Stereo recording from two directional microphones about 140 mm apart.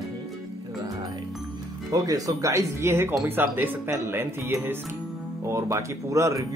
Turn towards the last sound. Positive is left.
turn(degrees=-20)  # may be behind; listen again after turning